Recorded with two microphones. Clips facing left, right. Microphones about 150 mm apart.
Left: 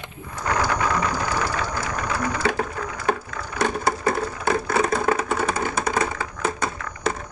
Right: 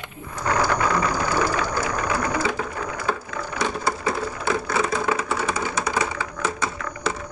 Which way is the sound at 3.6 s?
55° left (ahead or behind).